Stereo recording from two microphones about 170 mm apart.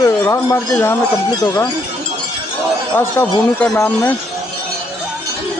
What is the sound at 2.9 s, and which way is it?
Speech, 10° left (ahead or behind).